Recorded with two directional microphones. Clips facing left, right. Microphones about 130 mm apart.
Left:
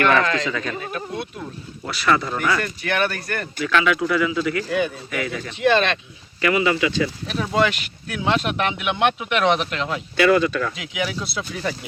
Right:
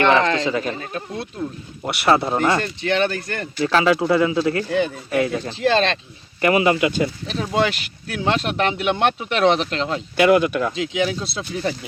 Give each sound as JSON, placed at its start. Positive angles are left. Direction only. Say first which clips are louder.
{"t": 0.0, "sound": "speech", "louder": "right 2 dB", "side_deg": -25}
{"t": 6.4, "sound": "speech", "louder": "right 3 dB", "side_deg": -40}